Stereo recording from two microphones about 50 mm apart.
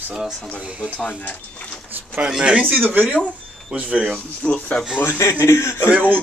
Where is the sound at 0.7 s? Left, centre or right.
Right.